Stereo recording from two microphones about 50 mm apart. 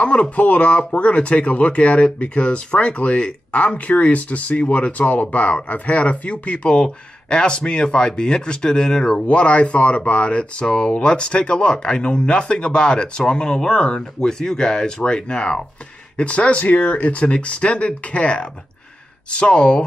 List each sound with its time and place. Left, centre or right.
0.0 s speech: left